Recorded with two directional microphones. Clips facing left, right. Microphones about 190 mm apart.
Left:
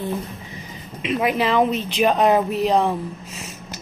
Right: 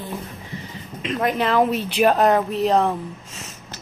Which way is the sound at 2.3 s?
5° left (ahead or behind).